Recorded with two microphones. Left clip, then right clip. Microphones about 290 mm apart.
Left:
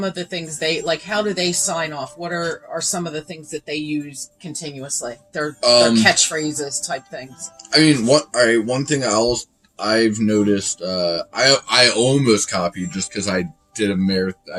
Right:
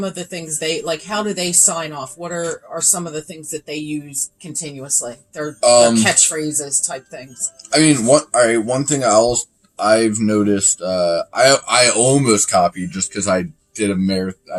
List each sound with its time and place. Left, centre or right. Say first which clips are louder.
0.0 s speech: left 1 dB; centre
5.5 s speech: right 3 dB; centre
6.0 s speech: left 1 dB; centre
7.7 s speech: right 1 dB; centre